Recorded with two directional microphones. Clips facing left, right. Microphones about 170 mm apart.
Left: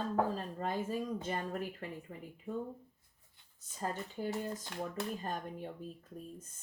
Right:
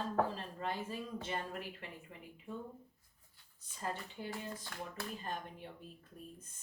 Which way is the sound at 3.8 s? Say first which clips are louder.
Left 4 dB; 40° left (ahead or behind).